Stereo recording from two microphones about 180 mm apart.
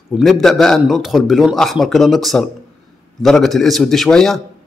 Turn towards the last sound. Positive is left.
turn(degrees=0)  # may be behind; listen again after turning